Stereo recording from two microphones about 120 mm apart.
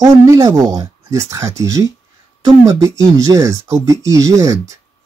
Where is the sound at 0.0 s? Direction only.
25° right (ahead or behind).